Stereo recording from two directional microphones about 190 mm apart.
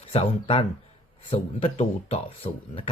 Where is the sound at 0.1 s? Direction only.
30° left (ahead or behind).